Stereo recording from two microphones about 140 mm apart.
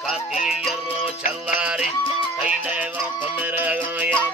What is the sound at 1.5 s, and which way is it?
Music, 5° right (ahead or behind).